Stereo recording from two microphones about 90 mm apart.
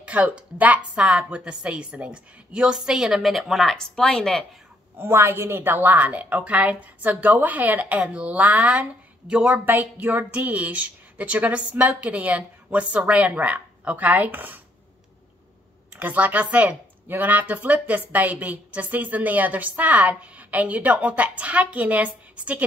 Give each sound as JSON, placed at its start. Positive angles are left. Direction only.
{"t": 0.0, "sound": "a woman's voice", "side_deg": -15}
{"t": 4.9, "sound": "speech", "side_deg": -25}
{"t": 16.0, "sound": "speech", "side_deg": -20}